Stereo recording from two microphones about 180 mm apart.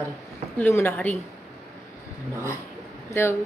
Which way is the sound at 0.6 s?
10° left (ahead or behind).